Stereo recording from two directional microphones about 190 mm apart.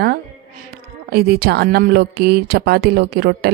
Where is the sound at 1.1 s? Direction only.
55° right (ahead or behind).